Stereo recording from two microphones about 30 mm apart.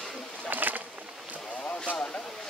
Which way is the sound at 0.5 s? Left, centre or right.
Right.